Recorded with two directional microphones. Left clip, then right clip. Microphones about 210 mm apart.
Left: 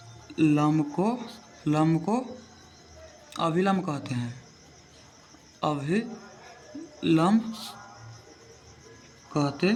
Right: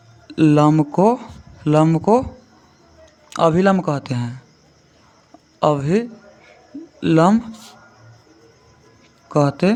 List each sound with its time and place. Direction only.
0.3 s speech: 60° right (ahead or behind)
3.2 s speech: 55° right (ahead or behind)
5.5 s speech: 55° right (ahead or behind)
9.3 s speech: 65° right (ahead or behind)